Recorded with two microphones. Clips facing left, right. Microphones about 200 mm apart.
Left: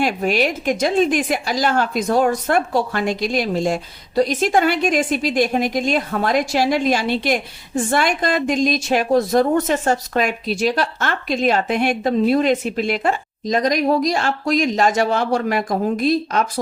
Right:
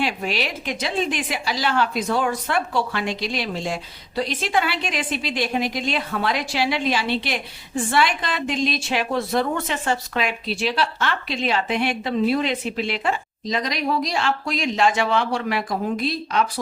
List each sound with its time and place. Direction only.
0.0 s speech: 45° left (ahead or behind)